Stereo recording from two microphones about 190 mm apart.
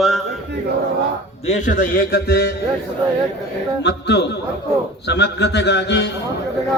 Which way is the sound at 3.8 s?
65° left (ahead or behind).